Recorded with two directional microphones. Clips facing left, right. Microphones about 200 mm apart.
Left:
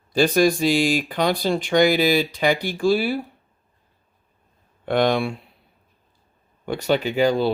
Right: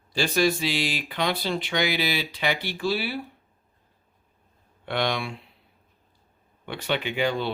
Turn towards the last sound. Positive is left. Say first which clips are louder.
# left 7 dB
turn(degrees=40)  # may be behind; listen again after turning